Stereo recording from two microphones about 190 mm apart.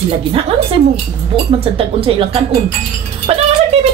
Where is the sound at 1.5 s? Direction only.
30° right (ahead or behind).